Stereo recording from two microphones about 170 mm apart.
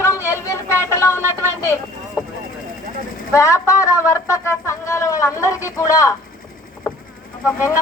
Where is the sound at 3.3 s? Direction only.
20° left (ahead or behind).